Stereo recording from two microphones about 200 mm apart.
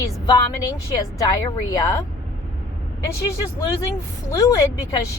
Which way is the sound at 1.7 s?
15° left (ahead or behind).